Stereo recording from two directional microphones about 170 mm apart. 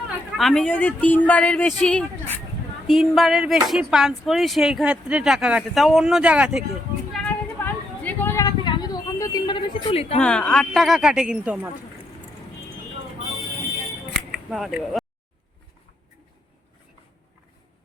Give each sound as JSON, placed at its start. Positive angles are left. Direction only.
{"t": 0.3, "sound": "speech", "side_deg": 0}
{"t": 7.1, "sound": "a sound", "side_deg": 10}
{"t": 10.2, "sound": "speech", "side_deg": 5}
{"t": 14.3, "sound": "speech", "side_deg": -5}